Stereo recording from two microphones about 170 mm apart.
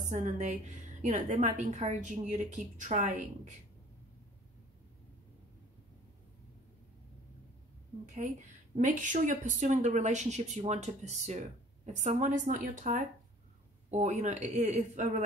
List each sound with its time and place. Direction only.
0.1 s a woman's voice: 45° right (ahead or behind)
8.1 s a woman's voice: 45° right (ahead or behind)